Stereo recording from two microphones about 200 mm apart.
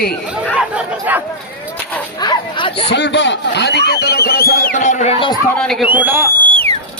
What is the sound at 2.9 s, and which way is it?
Speech, 60° left (ahead or behind).